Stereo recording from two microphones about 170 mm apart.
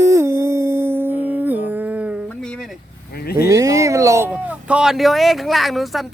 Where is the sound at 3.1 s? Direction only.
65° left (ahead or behind).